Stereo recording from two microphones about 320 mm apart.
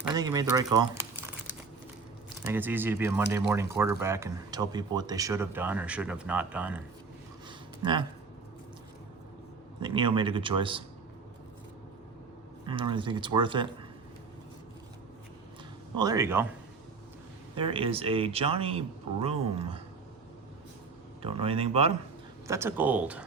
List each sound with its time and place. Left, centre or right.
0.1 s speech: centre
2.5 s speech: centre
9.8 s speech: centre
12.6 s speech: centre
16.0 s speech: centre
17.5 s speech: centre
21.2 s speech: centre
22.4 s speech: centre